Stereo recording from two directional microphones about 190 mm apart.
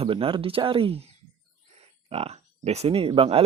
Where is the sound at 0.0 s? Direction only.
30° right (ahead or behind).